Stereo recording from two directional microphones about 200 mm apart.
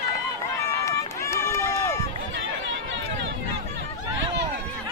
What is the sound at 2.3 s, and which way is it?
Run, 70° right (ahead or behind).